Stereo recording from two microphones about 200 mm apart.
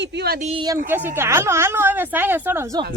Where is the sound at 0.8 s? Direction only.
10° right (ahead or behind).